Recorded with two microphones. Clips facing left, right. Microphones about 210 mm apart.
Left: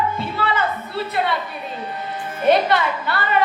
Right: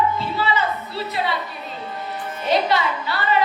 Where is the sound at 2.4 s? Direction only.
55° left (ahead or behind).